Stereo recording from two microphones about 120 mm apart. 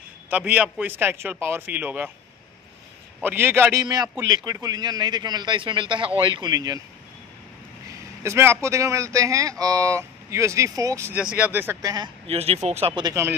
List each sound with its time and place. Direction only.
0.3 s a man's voice: 10° right (ahead or behind)
3.2 s a man's voice: 15° right (ahead or behind)
3.8 s a man's voice: 30° right (ahead or behind)
8.2 s speech: 20° right (ahead or behind)
11.1 s a man's voice: 10° right (ahead or behind)
11.8 s a man's voice: 35° right (ahead or behind)
12.3 s speech: 60° right (ahead or behind)